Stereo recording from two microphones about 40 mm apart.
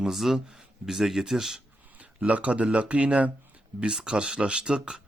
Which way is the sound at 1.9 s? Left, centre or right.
Right.